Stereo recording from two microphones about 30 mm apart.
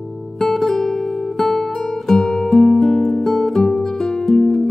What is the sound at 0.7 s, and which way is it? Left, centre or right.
Guitar, centre.